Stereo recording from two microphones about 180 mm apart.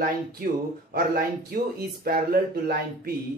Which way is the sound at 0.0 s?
55° right (ahead or behind).